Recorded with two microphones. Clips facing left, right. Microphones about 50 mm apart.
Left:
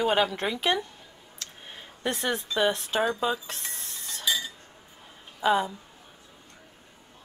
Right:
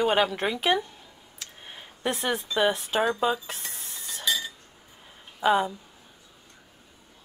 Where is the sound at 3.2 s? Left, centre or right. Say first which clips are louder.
Right 2 dB; centre.